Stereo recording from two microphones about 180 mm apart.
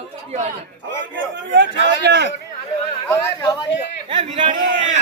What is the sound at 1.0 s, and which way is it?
A man's voice, 90° right.